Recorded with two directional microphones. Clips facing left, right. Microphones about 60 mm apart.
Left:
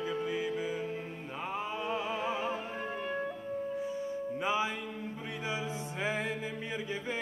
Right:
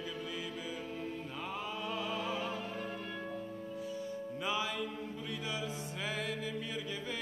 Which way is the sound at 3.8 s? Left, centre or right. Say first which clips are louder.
Left 5 dB; left.